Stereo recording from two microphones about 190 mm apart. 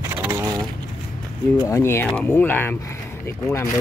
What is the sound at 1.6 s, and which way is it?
Speech, 15° left (ahead or behind).